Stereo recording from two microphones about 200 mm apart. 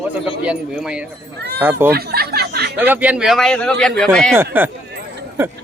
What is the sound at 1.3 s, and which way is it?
Speech, 55° right (ahead or behind).